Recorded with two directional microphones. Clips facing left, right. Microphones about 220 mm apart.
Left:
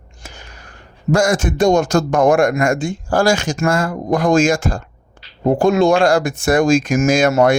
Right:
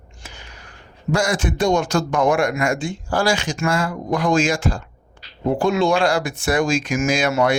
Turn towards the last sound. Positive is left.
turn(degrees=45)  # may be behind; listen again after turning